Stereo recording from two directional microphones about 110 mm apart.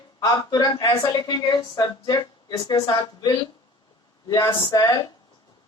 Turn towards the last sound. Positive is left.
turn(degrees=35)  # may be behind; listen again after turning